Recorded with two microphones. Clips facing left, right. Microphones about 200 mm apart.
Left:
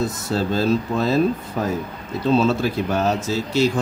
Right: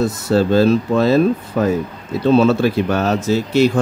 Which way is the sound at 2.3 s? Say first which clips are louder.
Right 5 dB; 70° right (ahead or behind).